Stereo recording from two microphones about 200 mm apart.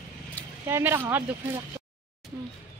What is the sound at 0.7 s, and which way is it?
Speech, 10° right (ahead or behind).